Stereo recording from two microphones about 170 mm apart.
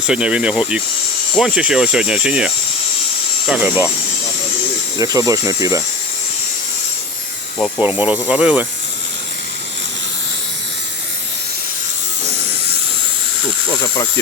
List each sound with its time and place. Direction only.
0.1 s speech: 5° right (ahead or behind)
4.9 s speech: 20° right (ahead or behind)
7.6 s speech: 10° right (ahead or behind)
13.7 s a sound: 20° left (ahead or behind)